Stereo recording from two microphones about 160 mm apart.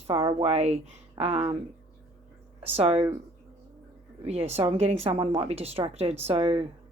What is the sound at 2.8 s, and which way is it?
Speech, 35° right (ahead or behind).